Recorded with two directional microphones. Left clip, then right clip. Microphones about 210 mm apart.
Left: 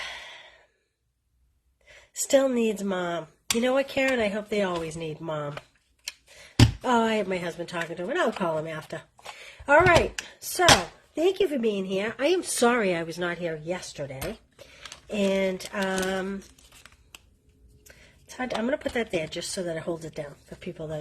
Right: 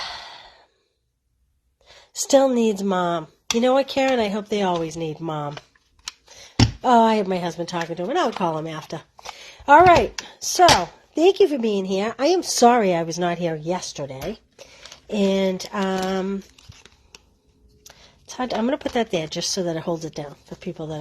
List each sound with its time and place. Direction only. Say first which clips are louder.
1.9 s speech: right 5 dB; 35° right (ahead or behind)
6.8 s speech: right 10 dB; 30° right (ahead or behind)
11.1 s speech: right 8 dB; 35° right (ahead or behind)
18.0 s speech: right 5 dB; 35° right (ahead or behind)